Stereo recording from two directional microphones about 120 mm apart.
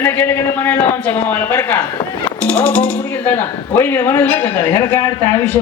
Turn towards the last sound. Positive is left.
turn(degrees=15)  # may be behind; listen again after turning